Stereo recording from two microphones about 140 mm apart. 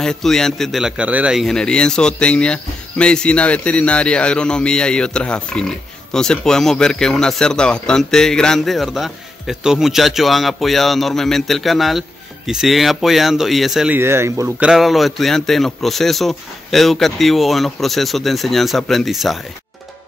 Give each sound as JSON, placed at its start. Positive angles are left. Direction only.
{"t": 0.0, "sound": "a man's voice", "side_deg": 5}
{"t": 13.9, "sound": "speech", "side_deg": -20}
{"t": 14.6, "sound": "a man's voice", "side_deg": -5}